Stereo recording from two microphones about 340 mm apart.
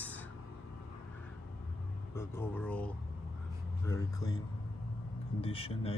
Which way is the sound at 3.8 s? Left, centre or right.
Centre.